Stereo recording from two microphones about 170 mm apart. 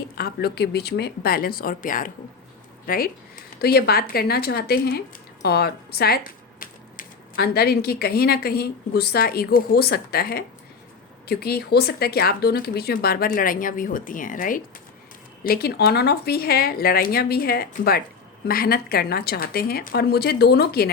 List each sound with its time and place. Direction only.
0.2 s speech: 70° left (ahead or behind)